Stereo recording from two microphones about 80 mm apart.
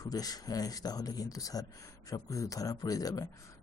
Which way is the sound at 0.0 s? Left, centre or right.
Left.